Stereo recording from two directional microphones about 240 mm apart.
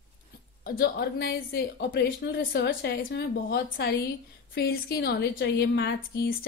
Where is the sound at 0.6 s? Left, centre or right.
Left.